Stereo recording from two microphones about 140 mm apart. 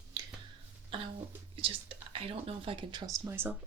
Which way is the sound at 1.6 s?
40° right (ahead or behind).